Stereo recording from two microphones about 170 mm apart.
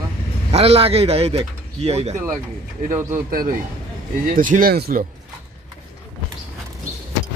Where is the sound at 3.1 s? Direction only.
55° right (ahead or behind).